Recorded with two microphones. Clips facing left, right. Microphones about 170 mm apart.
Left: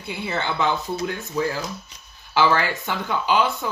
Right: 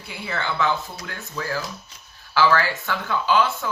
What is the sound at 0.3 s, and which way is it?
Speech, 20° left (ahead or behind).